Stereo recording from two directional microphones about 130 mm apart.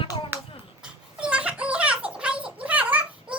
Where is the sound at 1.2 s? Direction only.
10° right (ahead or behind).